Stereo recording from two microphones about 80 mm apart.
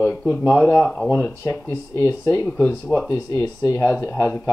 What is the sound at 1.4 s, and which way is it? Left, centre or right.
Speech, left.